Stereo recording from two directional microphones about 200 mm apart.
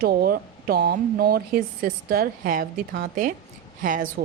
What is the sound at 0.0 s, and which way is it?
Speech, 50° right (ahead or behind).